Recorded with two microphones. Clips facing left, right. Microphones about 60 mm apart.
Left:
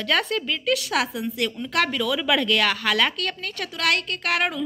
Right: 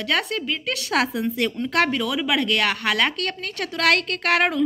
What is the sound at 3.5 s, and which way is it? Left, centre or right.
A woman's voice, right.